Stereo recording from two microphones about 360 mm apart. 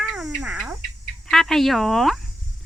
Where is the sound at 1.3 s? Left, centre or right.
Centre.